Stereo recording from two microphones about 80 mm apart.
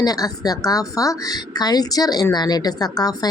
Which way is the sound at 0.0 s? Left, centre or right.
Left.